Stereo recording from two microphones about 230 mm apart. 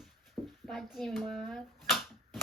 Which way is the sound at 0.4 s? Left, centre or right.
Centre.